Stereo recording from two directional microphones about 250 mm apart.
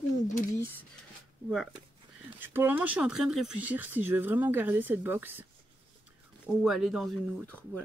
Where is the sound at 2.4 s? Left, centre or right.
Centre.